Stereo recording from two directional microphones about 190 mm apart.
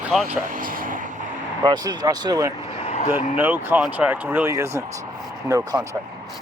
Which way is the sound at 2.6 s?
30° left (ahead or behind).